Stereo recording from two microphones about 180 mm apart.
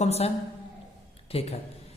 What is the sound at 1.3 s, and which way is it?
Speech, 35° left (ahead or behind).